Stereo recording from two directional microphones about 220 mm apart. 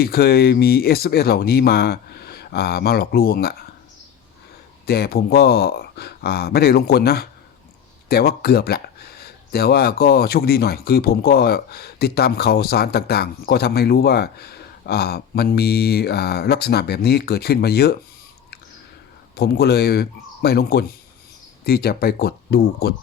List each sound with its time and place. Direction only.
0.0 s speech: 45° left (ahead or behind)
4.9 s speech: 45° left (ahead or behind)
19.4 s speech: 45° left (ahead or behind)